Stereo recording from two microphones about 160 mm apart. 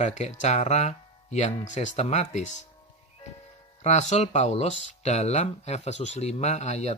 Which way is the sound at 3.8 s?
45° left (ahead or behind).